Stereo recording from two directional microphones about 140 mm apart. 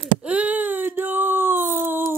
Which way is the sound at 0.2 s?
10° right (ahead or behind).